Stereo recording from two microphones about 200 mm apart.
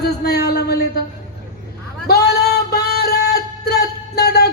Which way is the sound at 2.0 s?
55° left (ahead or behind).